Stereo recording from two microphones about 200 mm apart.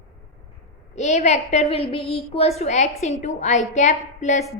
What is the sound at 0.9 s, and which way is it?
A woman's voice, 35° left (ahead or behind).